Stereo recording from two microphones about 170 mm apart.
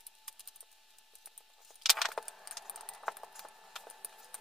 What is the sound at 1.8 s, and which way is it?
Keys jangling, centre (ahead or behind).